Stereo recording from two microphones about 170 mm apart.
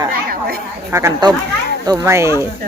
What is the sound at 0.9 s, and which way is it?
Speech, 20° right (ahead or behind).